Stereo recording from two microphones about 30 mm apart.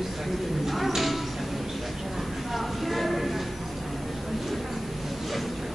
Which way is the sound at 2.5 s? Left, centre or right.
Centre.